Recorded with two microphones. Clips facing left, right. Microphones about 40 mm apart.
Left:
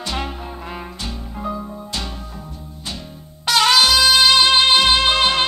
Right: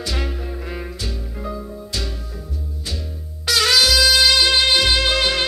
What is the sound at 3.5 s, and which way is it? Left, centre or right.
Music, left.